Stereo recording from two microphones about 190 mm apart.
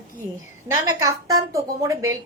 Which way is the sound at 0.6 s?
15° right (ahead or behind).